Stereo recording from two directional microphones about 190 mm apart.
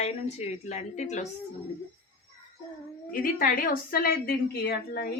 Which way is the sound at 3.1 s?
50° left (ahead or behind).